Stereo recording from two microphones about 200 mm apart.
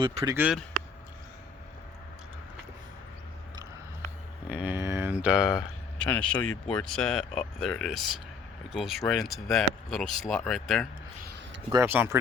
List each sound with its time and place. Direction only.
0.0 s speech: 25° right (ahead or behind)
0.3 s speech: 5° right (ahead or behind)
4.4 s a sound: 5° right (ahead or behind)
6.1 s speech: 5° left (ahead or behind)
11.7 s speech: 10° right (ahead or behind)